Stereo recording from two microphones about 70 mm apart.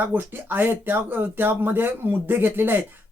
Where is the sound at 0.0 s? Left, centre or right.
Right.